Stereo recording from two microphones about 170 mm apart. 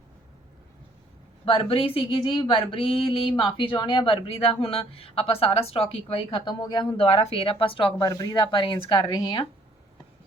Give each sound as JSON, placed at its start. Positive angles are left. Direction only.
{"t": 1.5, "sound": "speech", "side_deg": 30}